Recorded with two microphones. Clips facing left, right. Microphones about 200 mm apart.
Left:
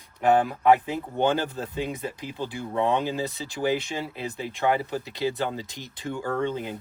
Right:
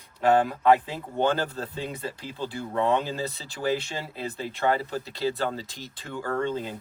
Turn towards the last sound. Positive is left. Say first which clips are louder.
# left 1 dB
turn(degrees=15)  # may be behind; listen again after turning